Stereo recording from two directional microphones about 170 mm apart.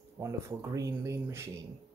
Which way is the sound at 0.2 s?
15° right (ahead or behind).